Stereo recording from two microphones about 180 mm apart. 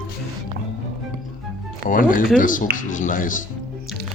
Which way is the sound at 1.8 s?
50° left (ahead or behind).